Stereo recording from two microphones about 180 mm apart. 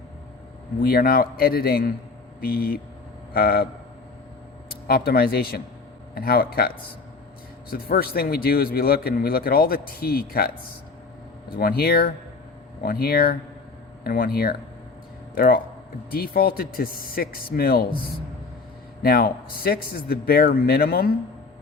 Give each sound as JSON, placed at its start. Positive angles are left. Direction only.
{"t": 0.8, "sound": "a man's voice", "side_deg": 55}
{"t": 4.7, "sound": "a man's voice", "side_deg": 55}
{"t": 19.0, "sound": "a man's voice", "side_deg": 55}